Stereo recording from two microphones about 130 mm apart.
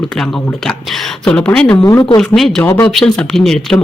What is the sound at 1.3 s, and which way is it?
Speech, 10° left (ahead or behind).